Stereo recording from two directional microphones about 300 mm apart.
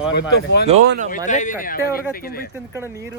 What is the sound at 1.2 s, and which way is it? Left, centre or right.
Speech, left.